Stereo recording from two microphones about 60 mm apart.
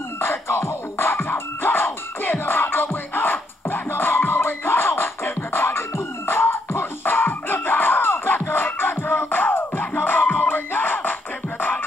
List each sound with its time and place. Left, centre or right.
0.2 s music: left